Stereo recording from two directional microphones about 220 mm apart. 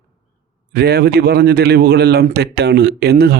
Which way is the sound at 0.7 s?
45° right (ahead or behind).